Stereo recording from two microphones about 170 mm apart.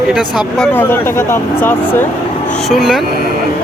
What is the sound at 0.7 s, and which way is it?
Speech, 15° left (ahead or behind).